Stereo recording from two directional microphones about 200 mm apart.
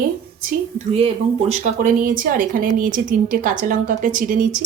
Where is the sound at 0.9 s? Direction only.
30° right (ahead or behind).